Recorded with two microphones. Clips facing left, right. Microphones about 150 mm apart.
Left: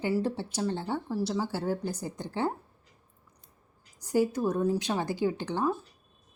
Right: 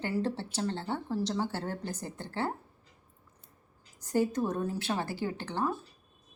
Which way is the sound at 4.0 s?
10° left (ahead or behind).